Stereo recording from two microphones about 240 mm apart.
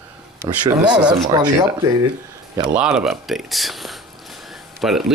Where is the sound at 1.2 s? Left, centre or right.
Centre.